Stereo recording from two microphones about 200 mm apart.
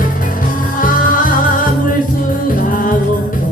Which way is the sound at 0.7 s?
40° left (ahead or behind).